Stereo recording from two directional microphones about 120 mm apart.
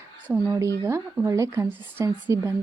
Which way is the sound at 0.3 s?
25° right (ahead or behind).